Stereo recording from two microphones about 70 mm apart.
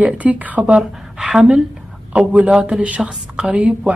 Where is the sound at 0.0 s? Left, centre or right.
Right; by 1.6 s centre.